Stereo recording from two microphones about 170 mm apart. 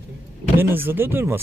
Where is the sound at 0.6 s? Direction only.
15° right (ahead or behind).